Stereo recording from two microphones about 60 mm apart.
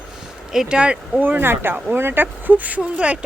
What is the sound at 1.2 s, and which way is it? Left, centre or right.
Speech, right.